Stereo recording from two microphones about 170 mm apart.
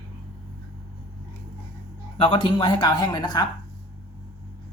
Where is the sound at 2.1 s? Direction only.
30° left (ahead or behind).